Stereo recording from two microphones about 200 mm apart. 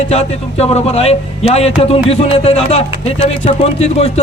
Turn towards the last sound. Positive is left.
turn(degrees=30)  # may be behind; listen again after turning